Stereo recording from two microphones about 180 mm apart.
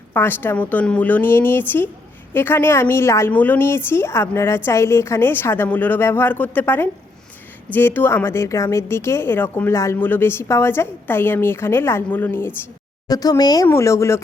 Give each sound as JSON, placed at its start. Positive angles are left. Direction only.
{"t": 0.1, "sound": "a woman's voice", "side_deg": 10}